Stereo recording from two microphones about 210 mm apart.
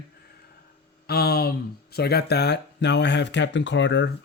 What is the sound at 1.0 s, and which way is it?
Speech, 50° left (ahead or behind).